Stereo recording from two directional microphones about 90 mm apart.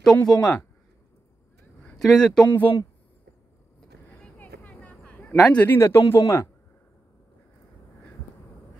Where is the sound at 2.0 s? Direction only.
5° left (ahead or behind).